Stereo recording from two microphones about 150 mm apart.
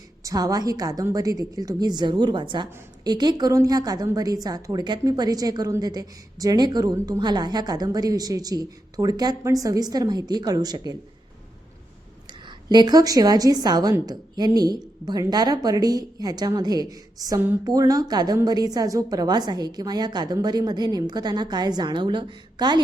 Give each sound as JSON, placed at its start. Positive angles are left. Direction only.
{"t": 0.2, "sound": "a woman's voice", "side_deg": -25}
{"t": 12.6, "sound": "a woman's voice", "side_deg": -30}